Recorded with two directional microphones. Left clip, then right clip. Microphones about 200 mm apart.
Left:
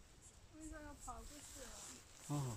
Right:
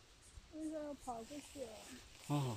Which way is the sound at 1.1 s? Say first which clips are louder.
Right 5 dB; 30° right (ahead or behind).